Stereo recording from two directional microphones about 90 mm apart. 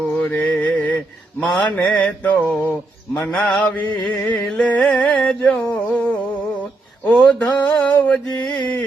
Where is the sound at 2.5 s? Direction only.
15° left (ahead or behind).